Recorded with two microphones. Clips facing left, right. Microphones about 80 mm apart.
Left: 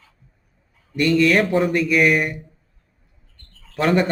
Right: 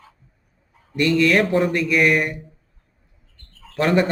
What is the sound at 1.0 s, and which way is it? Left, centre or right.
Speech, centre.